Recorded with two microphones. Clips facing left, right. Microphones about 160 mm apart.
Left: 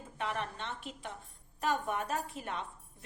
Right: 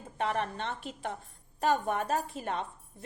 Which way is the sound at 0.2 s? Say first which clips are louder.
Right 6 dB; 35° right (ahead or behind).